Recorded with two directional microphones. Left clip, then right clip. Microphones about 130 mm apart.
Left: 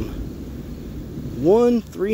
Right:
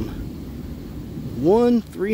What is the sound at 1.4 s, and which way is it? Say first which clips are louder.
Speech: left 1 dB; 20° right (ahead or behind).